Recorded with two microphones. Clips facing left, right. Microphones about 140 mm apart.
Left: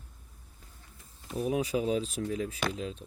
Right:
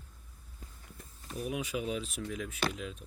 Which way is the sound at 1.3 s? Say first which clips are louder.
Left 6 dB; 35° left (ahead or behind).